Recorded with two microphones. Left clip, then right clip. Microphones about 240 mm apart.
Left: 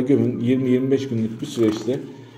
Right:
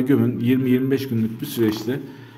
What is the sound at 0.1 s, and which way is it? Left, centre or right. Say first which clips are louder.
A man's voice: left 1 dB; right.